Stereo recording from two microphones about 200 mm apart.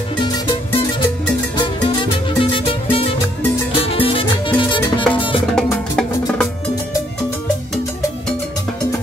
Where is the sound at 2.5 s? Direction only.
25° left (ahead or behind).